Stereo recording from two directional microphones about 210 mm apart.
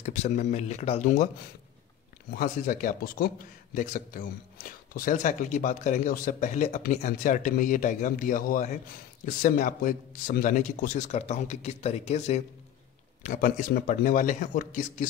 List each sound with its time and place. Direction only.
0.0 s speech: 35° left (ahead or behind)
2.3 s speech: 40° left (ahead or behind)